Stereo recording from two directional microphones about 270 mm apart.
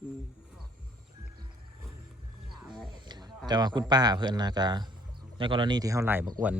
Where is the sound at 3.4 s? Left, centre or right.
Centre.